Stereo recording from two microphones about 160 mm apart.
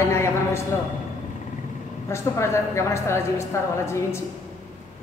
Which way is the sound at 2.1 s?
15° left (ahead or behind).